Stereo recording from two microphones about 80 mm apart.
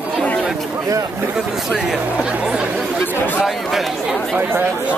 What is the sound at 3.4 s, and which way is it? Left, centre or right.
Speech, centre.